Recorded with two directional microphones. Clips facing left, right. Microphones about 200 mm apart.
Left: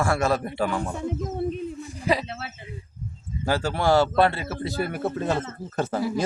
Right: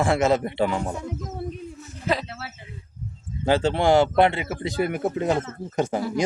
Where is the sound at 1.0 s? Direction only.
25° left (ahead or behind).